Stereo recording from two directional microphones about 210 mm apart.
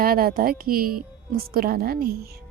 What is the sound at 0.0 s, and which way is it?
Speech, 45° right (ahead or behind).